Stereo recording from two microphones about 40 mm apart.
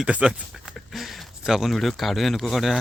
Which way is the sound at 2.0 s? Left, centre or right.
Centre.